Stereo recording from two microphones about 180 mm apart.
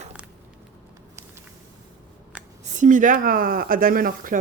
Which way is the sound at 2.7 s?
45° right (ahead or behind).